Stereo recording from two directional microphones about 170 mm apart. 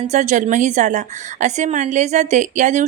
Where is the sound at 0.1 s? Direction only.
45° right (ahead or behind).